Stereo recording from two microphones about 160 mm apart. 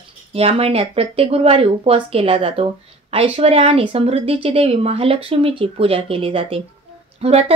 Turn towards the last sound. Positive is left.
turn(degrees=-40)  # may be behind; listen again after turning